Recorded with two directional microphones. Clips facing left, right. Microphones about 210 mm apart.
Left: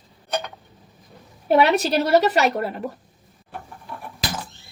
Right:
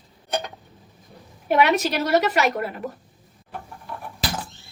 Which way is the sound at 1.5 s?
30° left (ahead or behind).